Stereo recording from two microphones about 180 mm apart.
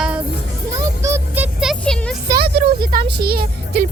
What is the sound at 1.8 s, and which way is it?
Speech, 5° left (ahead or behind).